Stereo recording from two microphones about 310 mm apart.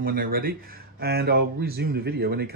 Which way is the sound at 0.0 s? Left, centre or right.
Right.